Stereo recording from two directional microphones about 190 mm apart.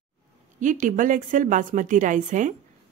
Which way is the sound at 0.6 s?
45° right (ahead or behind).